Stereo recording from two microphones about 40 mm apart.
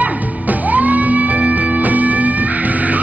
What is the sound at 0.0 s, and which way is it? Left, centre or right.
Music, right.